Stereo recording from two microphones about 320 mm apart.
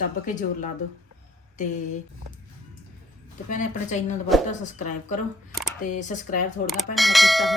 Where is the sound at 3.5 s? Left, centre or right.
Left.